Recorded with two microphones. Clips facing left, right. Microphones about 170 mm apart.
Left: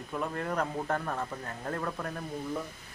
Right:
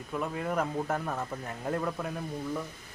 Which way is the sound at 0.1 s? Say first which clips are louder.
Right 1 dB; 5° right (ahead or behind).